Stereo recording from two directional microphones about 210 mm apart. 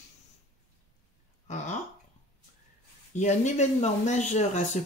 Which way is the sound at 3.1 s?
35° left (ahead or behind).